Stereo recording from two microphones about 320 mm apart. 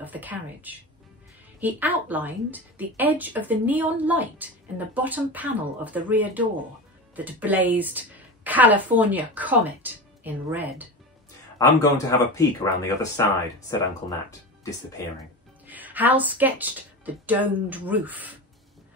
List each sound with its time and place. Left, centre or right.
0.0 s a woman's voice: centre
11.5 s speech: centre
15.6 s speech: centre